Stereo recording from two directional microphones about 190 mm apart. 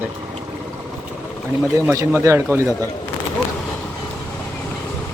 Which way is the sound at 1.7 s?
15° right (ahead or behind).